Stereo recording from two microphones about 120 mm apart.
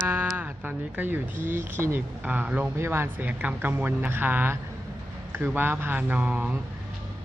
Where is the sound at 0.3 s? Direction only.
15° right (ahead or behind).